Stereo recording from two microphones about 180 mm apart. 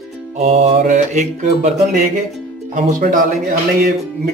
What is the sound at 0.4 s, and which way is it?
Music, 35° right (ahead or behind).